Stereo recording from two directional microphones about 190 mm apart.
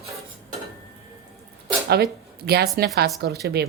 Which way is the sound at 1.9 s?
55° right (ahead or behind).